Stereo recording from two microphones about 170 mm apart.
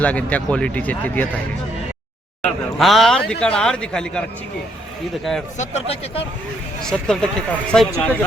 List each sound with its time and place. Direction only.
0.0 s speech: 10° left (ahead or behind)
2.7 s a man's voice: centre (ahead or behind)
5.5 s speech: 40° left (ahead or behind)
6.8 s a man's voice: 5° left (ahead or behind)